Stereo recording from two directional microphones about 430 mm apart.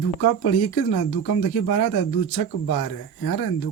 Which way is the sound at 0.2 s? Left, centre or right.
Left.